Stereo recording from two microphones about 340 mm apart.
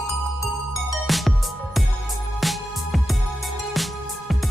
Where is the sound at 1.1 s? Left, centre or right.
Centre.